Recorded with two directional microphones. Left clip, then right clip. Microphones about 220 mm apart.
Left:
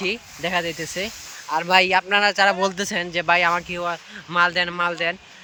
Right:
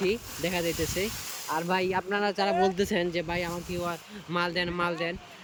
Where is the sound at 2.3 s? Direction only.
5° right (ahead or behind).